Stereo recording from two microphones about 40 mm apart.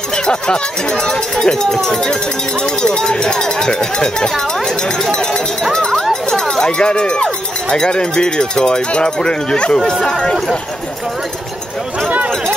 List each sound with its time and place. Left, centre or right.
0.1 s speech: centre